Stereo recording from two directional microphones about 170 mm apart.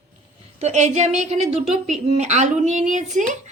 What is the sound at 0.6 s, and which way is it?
A woman's voice, 45° right (ahead or behind).